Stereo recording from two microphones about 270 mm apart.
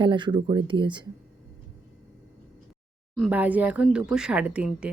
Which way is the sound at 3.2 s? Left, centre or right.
Centre.